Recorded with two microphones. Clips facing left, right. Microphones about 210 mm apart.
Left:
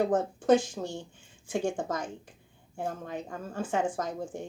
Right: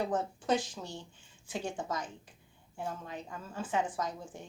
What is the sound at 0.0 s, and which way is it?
A woman's voice, 50° left (ahead or behind).